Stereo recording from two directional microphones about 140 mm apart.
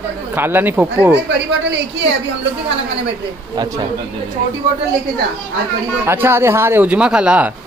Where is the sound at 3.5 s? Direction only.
30° right (ahead or behind).